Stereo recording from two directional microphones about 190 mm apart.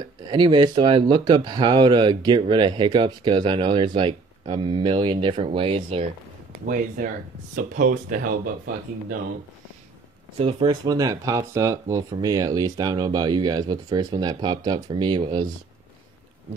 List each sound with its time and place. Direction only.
0.0 s speech: 25° right (ahead or behind)
6.5 s speech: 50° right (ahead or behind)
10.4 s speech: 20° right (ahead or behind)